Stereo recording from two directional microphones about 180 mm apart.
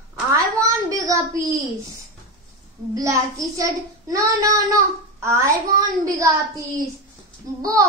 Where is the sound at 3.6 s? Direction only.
20° right (ahead or behind).